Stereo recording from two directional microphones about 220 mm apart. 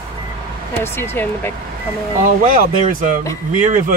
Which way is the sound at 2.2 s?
40° right (ahead or behind).